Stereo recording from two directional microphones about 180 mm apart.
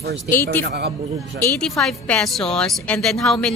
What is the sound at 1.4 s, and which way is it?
Speech, 15° left (ahead or behind).